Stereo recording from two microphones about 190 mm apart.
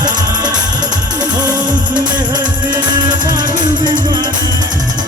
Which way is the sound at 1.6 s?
45° right (ahead or behind).